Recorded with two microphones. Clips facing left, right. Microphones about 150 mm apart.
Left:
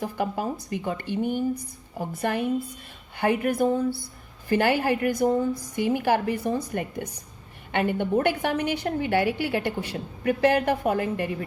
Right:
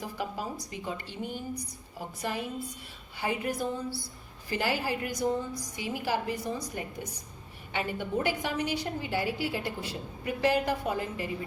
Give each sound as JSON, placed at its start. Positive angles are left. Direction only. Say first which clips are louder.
{"t": 0.0, "sound": "a woman's voice", "louder": "left 7 dB", "side_deg": 55}